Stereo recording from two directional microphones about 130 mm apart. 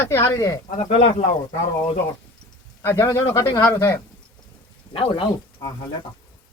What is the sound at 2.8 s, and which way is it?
A man's voice, 25° left (ahead or behind).